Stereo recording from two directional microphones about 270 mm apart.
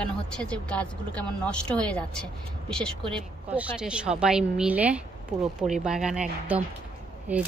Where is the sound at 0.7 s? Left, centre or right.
Centre.